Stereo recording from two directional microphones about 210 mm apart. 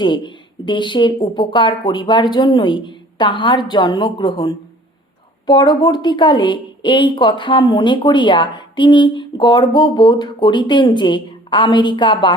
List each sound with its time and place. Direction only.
0.0 s a woman's voice: 20° left (ahead or behind)